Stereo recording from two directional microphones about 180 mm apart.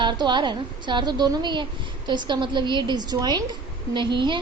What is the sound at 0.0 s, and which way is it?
A woman's voice, 25° right (ahead or behind).